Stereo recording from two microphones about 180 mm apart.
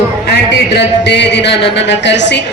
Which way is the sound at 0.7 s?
70° left (ahead or behind).